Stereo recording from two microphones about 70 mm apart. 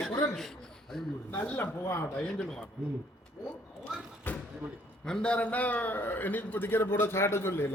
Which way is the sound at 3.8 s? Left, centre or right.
Left.